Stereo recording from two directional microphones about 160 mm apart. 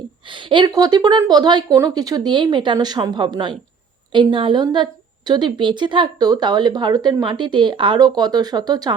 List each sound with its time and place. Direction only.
0.3 s a woman's voice: 30° right (ahead or behind)